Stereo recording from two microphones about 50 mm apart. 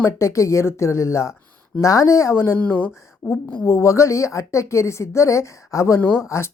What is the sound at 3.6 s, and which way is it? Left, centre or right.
A woman's voice, left.